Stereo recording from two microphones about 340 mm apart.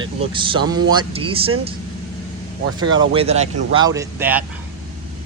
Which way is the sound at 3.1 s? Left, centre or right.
Centre.